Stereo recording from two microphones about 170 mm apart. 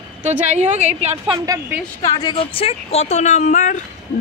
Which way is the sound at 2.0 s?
25° left (ahead or behind).